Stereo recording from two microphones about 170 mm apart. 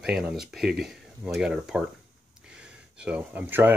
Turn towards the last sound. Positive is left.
turn(degrees=-10)  # may be behind; listen again after turning